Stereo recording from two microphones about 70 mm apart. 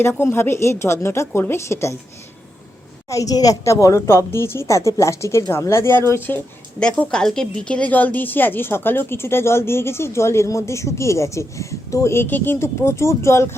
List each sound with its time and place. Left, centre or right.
0.0 s a woman's voice: left
3.1 s a woman's voice: left
6.7 s a woman's voice: centre; by 12.1 s left
12.1 s a woman's voice: left